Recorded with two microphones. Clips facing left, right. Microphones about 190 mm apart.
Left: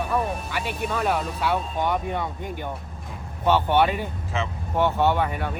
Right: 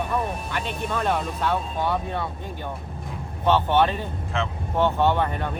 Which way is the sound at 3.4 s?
10° left (ahead or behind).